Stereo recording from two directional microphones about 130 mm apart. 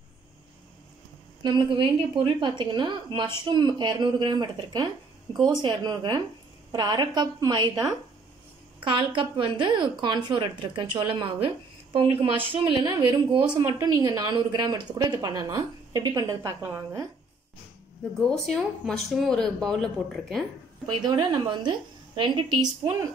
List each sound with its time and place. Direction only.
1.4 s a woman's voice: 35° right (ahead or behind); by 17.0 s 20° right (ahead or behind)
18.1 s speech: centre (ahead or behind)
20.8 s a woman's voice: 35° right (ahead or behind)